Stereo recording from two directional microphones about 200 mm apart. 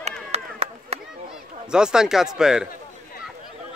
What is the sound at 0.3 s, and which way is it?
Chop, 30° right (ahead or behind).